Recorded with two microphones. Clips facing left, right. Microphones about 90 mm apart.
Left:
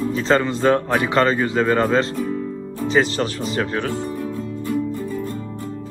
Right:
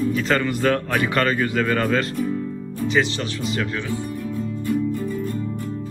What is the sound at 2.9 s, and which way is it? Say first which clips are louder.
Speech: left 3 dB; 40° left (ahead or behind).